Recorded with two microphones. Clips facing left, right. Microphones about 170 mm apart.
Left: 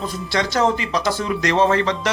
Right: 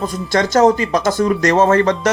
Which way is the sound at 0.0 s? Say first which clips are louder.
Right 5 dB; 45° right (ahead or behind).